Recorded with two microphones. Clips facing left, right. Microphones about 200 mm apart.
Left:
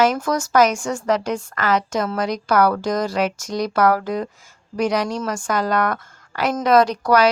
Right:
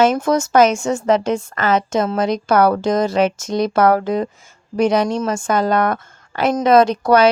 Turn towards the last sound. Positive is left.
turn(degrees=-25)  # may be behind; listen again after turning